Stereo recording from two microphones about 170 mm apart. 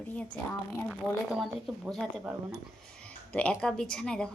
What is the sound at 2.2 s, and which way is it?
Speech, 15° right (ahead or behind).